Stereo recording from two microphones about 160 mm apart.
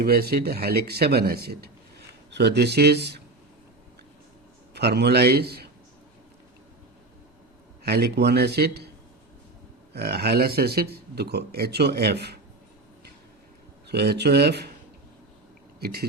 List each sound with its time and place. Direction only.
0.0 s speech: 75° right (ahead or behind); by 3.2 s 90° right
4.7 s a man's voice: 90° right
7.9 s speech: 85° right
9.9 s speech: 85° right
13.8 s speech: 90° right
15.8 s speech: 75° right (ahead or behind)